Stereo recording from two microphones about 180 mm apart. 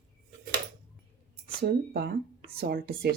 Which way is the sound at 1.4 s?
60° right (ahead or behind).